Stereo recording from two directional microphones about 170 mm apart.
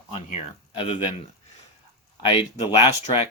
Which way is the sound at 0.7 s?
30° left (ahead or behind).